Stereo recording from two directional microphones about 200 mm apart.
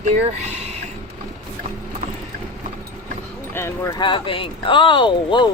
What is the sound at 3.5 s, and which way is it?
Speech, 15° left (ahead or behind).